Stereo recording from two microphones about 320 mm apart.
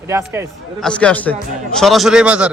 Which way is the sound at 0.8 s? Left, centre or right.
Centre.